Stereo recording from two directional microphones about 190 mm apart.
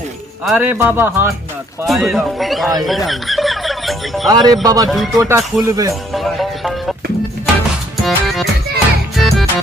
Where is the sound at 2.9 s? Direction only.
Centre (ahead or behind).